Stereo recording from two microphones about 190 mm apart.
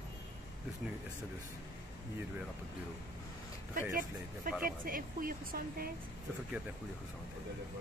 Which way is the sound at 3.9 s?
50° right (ahead or behind).